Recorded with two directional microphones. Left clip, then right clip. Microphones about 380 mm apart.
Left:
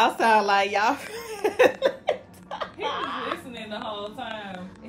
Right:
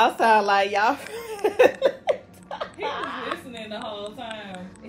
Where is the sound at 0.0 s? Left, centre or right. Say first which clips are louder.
Right 2 dB; centre.